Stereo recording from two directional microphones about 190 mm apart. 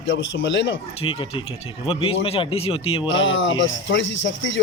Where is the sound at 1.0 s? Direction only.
25° left (ahead or behind).